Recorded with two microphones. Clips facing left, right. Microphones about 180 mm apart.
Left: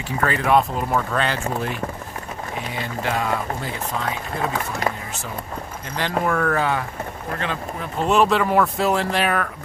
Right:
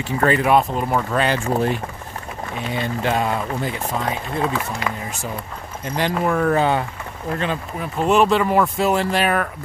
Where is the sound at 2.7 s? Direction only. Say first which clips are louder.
Right 5 dB; 25° right (ahead or behind).